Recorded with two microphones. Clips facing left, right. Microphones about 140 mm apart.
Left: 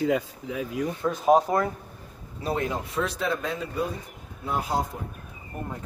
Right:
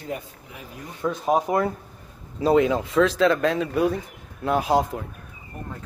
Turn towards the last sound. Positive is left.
turn(degrees=-90)